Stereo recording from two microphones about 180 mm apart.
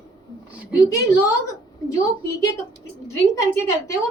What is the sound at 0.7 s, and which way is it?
A woman's voice, 20° left (ahead or behind).